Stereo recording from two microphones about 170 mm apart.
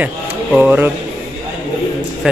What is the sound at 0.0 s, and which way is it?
Speech, 10° right (ahead or behind).